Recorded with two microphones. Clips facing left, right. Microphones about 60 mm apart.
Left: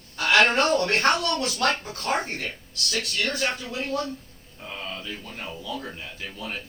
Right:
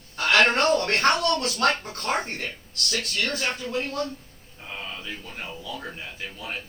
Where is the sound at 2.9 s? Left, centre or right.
Centre.